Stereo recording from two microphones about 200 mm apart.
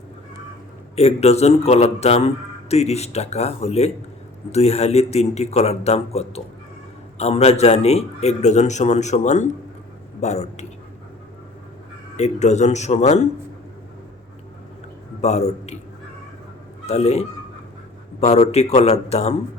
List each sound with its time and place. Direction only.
0.9 s a man's voice: 30° left (ahead or behind)
12.1 s a man's voice: 35° left (ahead or behind)
15.2 s a man's voice: 35° left (ahead or behind)
16.8 s a man's voice: 35° left (ahead or behind)